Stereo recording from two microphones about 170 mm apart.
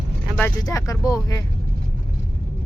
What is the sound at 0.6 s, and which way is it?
Speech, 20° left (ahead or behind).